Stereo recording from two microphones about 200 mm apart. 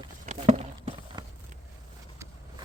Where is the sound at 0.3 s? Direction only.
35° right (ahead or behind).